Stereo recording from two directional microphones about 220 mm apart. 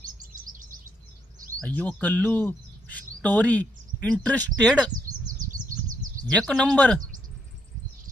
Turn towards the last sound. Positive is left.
turn(degrees=5)  # may be behind; listen again after turning